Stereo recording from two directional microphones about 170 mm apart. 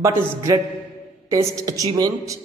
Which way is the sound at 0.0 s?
15° right (ahead or behind).